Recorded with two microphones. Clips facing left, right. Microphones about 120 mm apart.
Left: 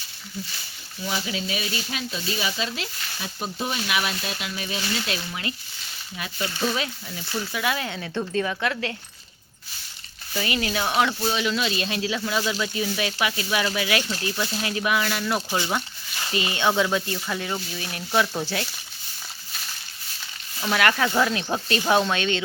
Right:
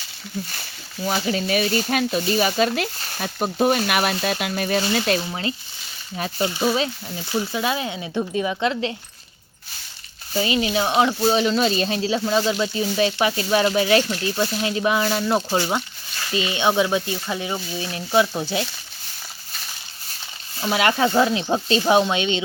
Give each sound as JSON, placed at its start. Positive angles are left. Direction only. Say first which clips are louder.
{"t": 1.0, "sound": "speech", "louder": "right 6 dB", "side_deg": -45}
{"t": 5.3, "sound": "speech", "louder": "right 5 dB", "side_deg": -30}
{"t": 6.5, "sound": "speech", "louder": "right 3 dB", "side_deg": -15}
{"t": 10.3, "sound": "speech", "louder": "right 5 dB", "side_deg": -20}
{"t": 11.3, "sound": "speech", "louder": "right 6 dB", "side_deg": -40}
{"t": 15.4, "sound": "speech", "louder": "right 4 dB", "side_deg": -20}
{"t": 20.6, "sound": "speech", "louder": "right 3 dB", "side_deg": -20}